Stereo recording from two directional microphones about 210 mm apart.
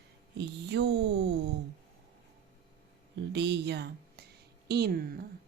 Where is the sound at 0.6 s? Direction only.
55° right (ahead or behind).